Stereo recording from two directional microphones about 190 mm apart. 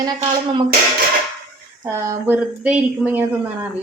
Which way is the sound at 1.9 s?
15° right (ahead or behind).